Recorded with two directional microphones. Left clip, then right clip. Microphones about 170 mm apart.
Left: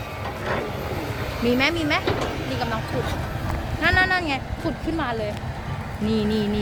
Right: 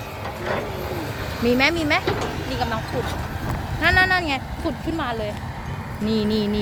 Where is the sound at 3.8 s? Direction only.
35° right (ahead or behind).